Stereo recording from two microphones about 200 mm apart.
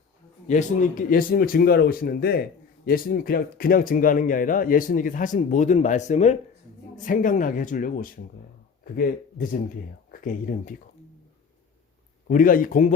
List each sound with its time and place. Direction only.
0.4 s speech: 40° left (ahead or behind)
12.3 s speech: 45° left (ahead or behind)